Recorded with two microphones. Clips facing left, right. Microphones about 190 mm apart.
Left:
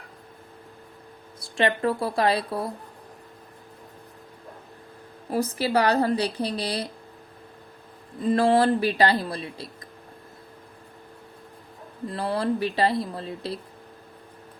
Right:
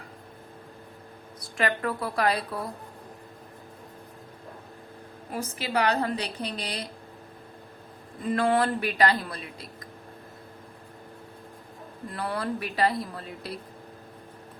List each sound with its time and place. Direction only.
1.4 s a woman's voice: 25° left (ahead or behind)
5.3 s a woman's voice: 35° left (ahead or behind)
8.3 s a woman's voice: 30° left (ahead or behind)
12.1 s a woman's voice: 30° left (ahead or behind)